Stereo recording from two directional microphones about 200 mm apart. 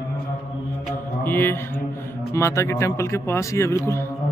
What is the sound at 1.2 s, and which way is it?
A man's voice, 10° left (ahead or behind).